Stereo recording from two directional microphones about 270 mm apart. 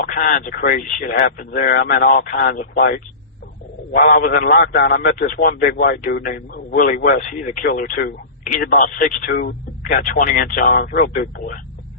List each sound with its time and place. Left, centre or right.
0.0 s a man's voice: left